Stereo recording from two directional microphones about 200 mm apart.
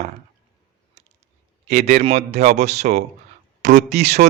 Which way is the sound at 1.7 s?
35° right (ahead or behind).